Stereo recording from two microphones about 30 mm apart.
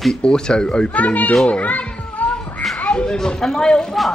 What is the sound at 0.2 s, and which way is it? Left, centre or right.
Speech, left.